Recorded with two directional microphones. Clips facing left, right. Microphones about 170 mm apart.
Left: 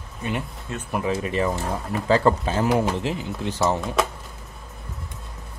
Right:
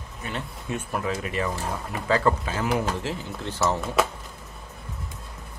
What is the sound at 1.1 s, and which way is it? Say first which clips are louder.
Speech: left 5 dB; 30° left (ahead or behind).